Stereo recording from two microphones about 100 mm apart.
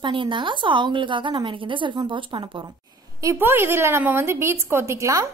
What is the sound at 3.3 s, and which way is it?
A woman's voice, 20° right (ahead or behind).